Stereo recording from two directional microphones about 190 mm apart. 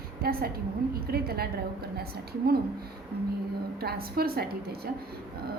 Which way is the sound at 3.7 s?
55° right (ahead or behind).